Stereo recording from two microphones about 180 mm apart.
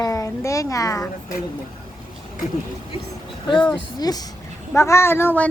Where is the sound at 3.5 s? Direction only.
25° left (ahead or behind).